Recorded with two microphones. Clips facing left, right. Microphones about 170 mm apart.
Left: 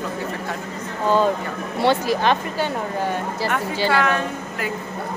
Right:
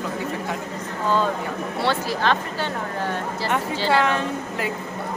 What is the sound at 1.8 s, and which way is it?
Speech, 15° left (ahead or behind).